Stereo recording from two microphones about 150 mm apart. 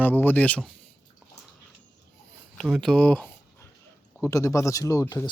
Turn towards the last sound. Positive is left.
turn(degrees=20)  # may be behind; listen again after turning